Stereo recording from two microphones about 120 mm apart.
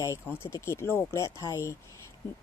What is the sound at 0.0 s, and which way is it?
Speech, 25° left (ahead or behind).